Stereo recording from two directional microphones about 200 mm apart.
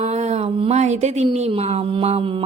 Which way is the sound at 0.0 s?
35° right (ahead or behind).